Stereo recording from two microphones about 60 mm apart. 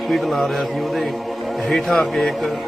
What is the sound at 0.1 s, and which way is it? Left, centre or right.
Speech, centre.